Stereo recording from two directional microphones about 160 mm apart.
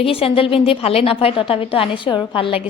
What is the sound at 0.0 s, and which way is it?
A woman's voice, 35° left (ahead or behind).